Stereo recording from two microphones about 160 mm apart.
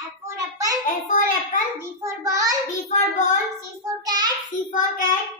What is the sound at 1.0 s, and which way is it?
Child singing, 55° left (ahead or behind).